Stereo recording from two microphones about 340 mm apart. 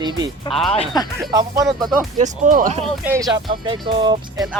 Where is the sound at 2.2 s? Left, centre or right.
Right.